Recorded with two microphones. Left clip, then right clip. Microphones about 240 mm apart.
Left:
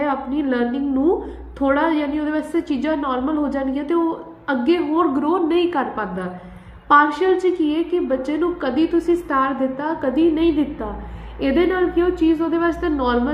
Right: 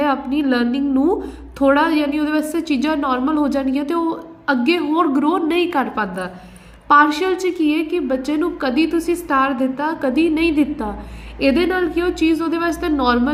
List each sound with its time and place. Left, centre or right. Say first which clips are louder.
0.0 s a woman's voice: right 3 dB; right